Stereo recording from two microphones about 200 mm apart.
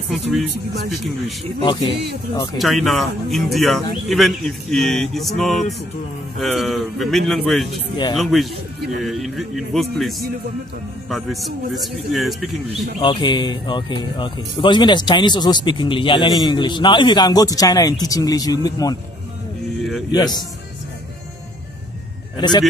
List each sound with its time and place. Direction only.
0.1 s speech: centre (ahead or behind)
1.6 s speech: 25° left (ahead or behind)
2.6 s speech: centre (ahead or behind)
7.9 s speech: 25° left (ahead or behind)
8.2 s speech: centre (ahead or behind)
13.0 s speech: 25° left (ahead or behind)
20.1 s speech: 20° left (ahead or behind)